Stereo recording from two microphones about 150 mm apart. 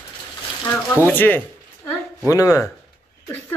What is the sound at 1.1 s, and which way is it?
A woman's voice, 10° left (ahead or behind).